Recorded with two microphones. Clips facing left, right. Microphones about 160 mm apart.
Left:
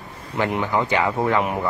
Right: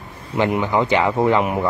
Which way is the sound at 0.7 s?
20° right (ahead or behind).